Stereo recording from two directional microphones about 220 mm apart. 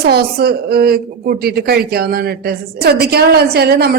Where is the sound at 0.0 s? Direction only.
45° right (ahead or behind).